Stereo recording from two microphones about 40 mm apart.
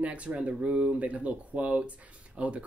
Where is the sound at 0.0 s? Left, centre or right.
Right.